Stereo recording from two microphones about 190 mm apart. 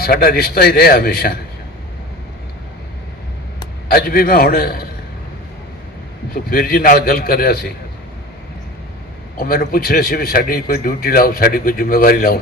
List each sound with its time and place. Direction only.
0.0 s a man's voice: 50° left (ahead or behind)
3.8 s a man's voice: 50° left (ahead or behind)
6.3 s a man's voice: 50° left (ahead or behind)
9.4 s a man's voice: 50° left (ahead or behind)